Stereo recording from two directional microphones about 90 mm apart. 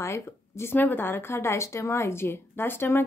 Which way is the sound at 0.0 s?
30° left (ahead or behind).